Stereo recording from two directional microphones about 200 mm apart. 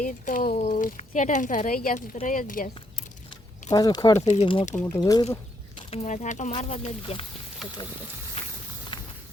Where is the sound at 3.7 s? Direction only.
20° left (ahead or behind).